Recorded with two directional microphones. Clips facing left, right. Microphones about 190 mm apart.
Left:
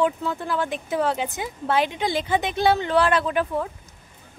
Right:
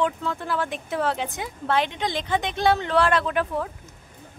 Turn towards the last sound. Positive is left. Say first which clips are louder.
# left 1 dB
turn(degrees=0)  # may be behind; listen again after turning